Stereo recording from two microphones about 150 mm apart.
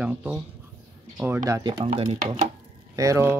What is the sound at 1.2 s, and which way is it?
Speech, 20° right (ahead or behind).